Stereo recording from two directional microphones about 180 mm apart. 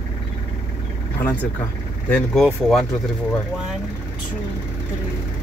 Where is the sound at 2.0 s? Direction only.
10° left (ahead or behind).